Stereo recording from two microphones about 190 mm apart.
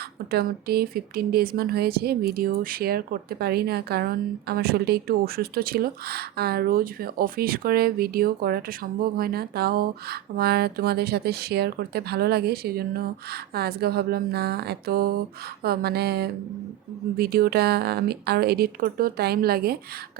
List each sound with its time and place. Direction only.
0.3 s speech: 55° right (ahead or behind)